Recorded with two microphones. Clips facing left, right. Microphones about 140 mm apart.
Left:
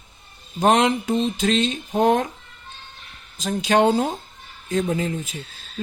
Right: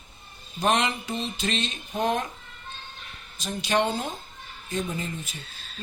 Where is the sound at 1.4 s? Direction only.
90° left.